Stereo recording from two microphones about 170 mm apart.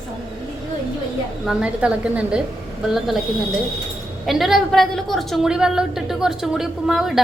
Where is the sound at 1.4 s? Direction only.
5° right (ahead or behind).